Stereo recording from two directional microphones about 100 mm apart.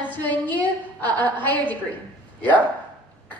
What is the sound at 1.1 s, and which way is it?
Speech, 15° left (ahead or behind).